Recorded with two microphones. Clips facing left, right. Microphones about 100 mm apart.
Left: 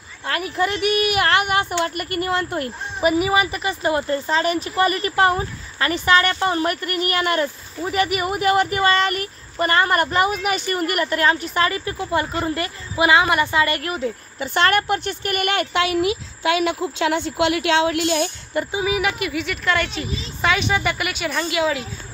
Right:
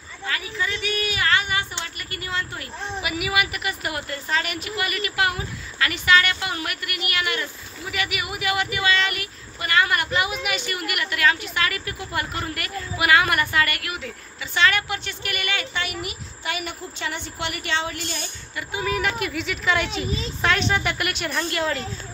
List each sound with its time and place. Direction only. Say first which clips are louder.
0.3 s speech: left 7 dB; 55° left (ahead or behind); by 13.7 s 20° left (ahead or behind)
13.7 s speech: left 8 dB; 35° left (ahead or behind)
14.4 s speech: left 4 dB; 50° left (ahead or behind); by 18.3 s 85° left
18.8 s a woman's voice: left 1 dB; 5° left (ahead or behind)